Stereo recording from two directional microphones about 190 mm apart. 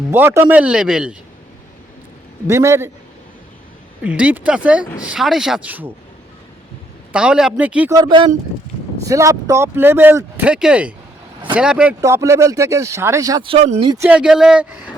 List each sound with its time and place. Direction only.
0.1 s speech: 10° right (ahead or behind)
2.5 s speech: 15° right (ahead or behind)
4.0 s speech: 5° right (ahead or behind)
7.1 s speech: 5° right (ahead or behind)
11.9 s speech: 15° right (ahead or behind)
14.0 s speech: 5° right (ahead or behind)